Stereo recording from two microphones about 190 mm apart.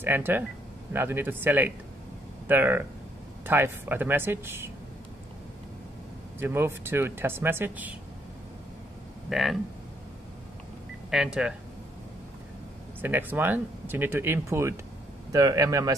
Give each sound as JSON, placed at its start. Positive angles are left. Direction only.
{"t": 0.0, "sound": "speech", "side_deg": -10}
{"t": 6.4, "sound": "speech", "side_deg": -10}
{"t": 9.3, "sound": "speech", "side_deg": 0}
{"t": 11.1, "sound": "speech", "side_deg": -5}
{"t": 13.0, "sound": "speech", "side_deg": -10}